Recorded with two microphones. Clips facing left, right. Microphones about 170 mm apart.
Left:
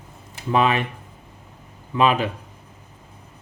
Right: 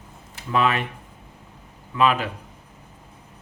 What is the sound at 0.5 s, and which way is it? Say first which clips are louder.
Speech: left 2 dB; 20° left (ahead or behind).